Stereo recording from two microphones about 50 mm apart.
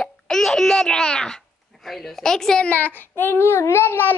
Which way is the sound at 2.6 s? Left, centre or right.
Left.